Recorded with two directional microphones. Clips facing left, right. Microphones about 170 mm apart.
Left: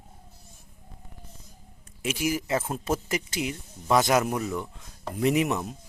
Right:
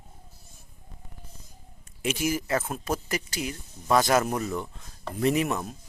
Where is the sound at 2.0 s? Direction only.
10° left (ahead or behind).